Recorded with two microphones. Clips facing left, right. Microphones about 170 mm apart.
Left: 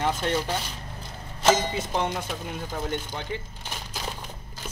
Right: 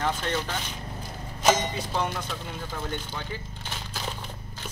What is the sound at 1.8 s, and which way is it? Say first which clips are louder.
Speech: left 2 dB; 20° left (ahead or behind).